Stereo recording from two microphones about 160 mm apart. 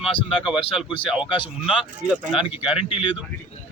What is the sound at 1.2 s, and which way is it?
Speech, 30° left (ahead or behind).